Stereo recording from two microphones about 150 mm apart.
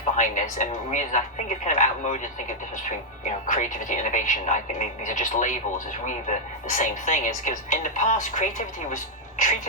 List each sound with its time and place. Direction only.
0.2 s speech: 55° left (ahead or behind)